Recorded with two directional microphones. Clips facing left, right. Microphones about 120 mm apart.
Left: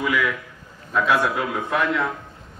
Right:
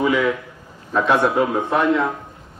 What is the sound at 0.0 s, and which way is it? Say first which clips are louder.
A man's voice: right 5 dB; 30° right (ahead or behind).